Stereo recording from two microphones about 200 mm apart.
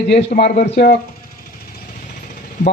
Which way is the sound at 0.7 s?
50° left (ahead or behind).